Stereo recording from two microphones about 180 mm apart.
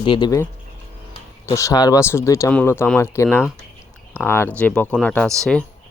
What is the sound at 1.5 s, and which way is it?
Speech, 15° left (ahead or behind).